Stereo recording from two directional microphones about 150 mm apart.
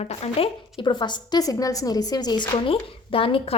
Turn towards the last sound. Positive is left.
turn(degrees=35)  # may be behind; listen again after turning